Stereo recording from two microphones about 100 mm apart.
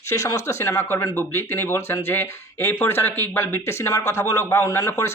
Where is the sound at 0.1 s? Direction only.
30° left (ahead or behind).